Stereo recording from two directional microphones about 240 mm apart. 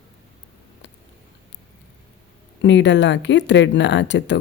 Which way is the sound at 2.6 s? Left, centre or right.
Left.